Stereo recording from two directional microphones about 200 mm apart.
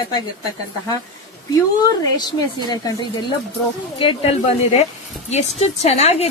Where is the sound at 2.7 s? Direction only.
20° left (ahead or behind).